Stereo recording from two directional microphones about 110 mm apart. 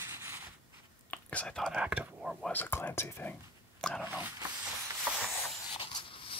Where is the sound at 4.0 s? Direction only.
15° right (ahead or behind).